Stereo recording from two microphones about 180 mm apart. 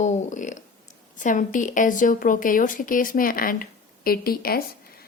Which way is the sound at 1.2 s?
45° left (ahead or behind).